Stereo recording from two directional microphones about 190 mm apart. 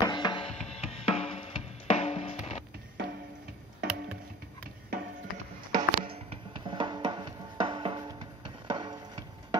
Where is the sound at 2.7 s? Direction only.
50° right (ahead or behind).